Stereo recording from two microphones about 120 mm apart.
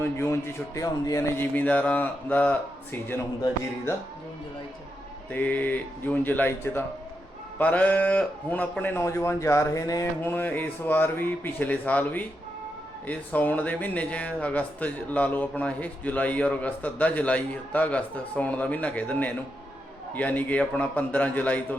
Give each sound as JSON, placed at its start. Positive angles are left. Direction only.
{"t": 0.0, "sound": "a man's voice", "side_deg": 20}
{"t": 1.5, "sound": "speech", "side_deg": 15}
{"t": 5.3, "sound": "speech", "side_deg": 15}
{"t": 10.2, "sound": "speech", "side_deg": 15}